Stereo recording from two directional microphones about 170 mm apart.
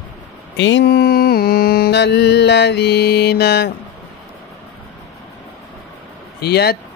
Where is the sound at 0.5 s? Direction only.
90° left.